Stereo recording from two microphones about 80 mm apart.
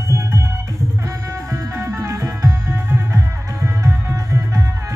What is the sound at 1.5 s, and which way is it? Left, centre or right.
Music, right.